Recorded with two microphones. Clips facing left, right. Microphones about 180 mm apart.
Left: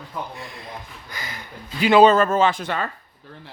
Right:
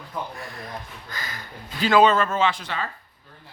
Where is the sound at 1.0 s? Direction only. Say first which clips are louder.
Even; 20° left (ahead or behind).